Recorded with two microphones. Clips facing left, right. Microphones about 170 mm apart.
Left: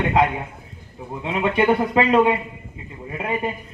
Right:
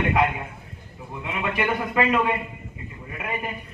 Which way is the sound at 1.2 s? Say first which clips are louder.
Left 7 dB; 30° left (ahead or behind).